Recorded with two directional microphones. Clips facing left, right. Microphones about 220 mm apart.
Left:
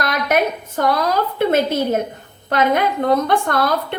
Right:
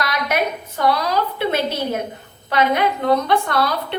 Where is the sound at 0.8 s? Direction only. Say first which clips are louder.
Left 1 dB; 45° left (ahead or behind).